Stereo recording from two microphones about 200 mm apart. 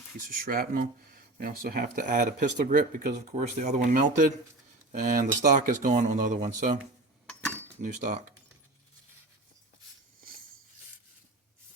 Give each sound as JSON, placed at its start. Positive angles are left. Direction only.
{"t": 0.4, "sound": "speech", "side_deg": -45}
{"t": 7.8, "sound": "speech", "side_deg": -40}